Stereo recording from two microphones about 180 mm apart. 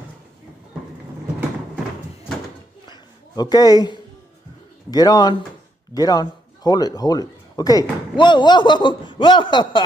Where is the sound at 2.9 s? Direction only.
20° left (ahead or behind).